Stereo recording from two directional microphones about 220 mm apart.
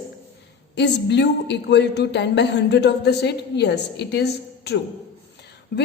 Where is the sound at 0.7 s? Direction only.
50° left (ahead or behind).